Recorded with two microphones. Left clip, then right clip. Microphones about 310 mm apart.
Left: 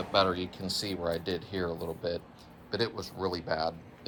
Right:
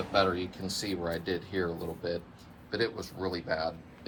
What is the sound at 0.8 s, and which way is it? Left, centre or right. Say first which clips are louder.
Speech: left 1 dB; left.